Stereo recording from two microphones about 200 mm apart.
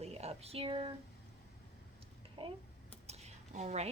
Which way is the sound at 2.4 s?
25° right (ahead or behind).